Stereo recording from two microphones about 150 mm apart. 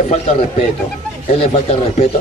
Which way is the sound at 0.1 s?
50° left (ahead or behind).